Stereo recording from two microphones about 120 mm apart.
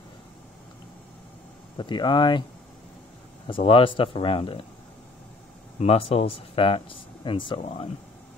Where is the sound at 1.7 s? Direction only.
40° left (ahead or behind).